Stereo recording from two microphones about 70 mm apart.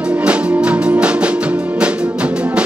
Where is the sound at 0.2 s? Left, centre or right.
Centre.